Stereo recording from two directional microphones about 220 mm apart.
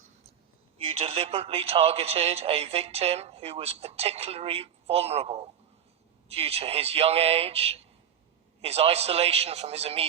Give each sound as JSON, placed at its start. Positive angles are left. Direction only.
{"t": 0.8, "sound": "a man's voice", "side_deg": -25}